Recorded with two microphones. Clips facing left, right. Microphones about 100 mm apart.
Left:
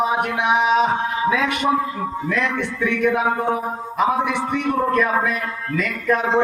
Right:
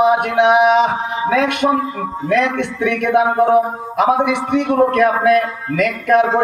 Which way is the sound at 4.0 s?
65° right (ahead or behind).